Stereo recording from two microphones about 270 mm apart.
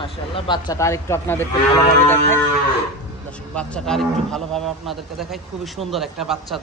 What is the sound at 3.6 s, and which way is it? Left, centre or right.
A man's voice, centre.